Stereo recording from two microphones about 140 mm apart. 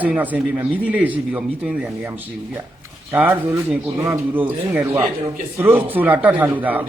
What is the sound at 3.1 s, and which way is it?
A man's voice, 10° right (ahead or behind).